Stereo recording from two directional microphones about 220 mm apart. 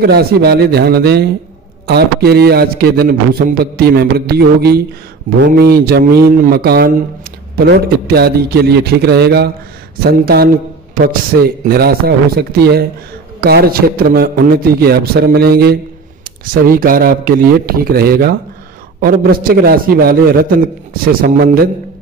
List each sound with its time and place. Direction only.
0.0 s a man's voice: 45° right (ahead or behind)